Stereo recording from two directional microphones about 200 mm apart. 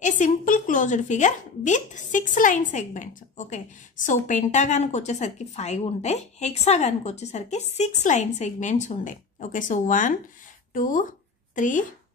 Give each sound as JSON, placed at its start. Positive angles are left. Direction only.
{"t": 0.0, "sound": "speech", "side_deg": 40}